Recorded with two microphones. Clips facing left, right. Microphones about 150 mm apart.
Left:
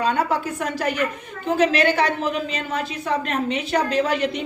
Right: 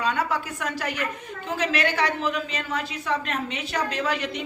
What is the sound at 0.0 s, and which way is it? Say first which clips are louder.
A woman's voice: left 4 dB; 30° left (ahead or behind).